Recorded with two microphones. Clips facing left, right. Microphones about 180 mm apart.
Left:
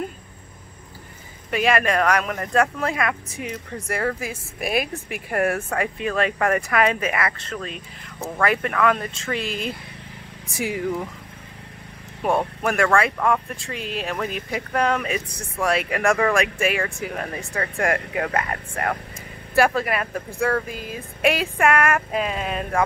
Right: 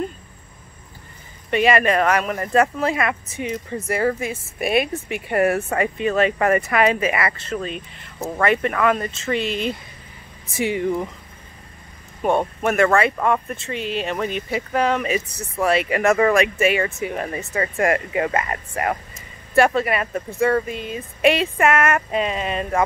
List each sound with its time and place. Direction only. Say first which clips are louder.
1.5 s speech: right 3 dB; centre (ahead or behind)
12.6 s speech: right 3 dB; centre (ahead or behind)